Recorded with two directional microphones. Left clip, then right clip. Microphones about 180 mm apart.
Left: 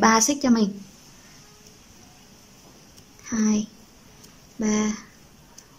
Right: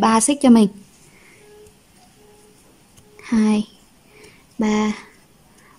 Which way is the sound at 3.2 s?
20° right (ahead or behind).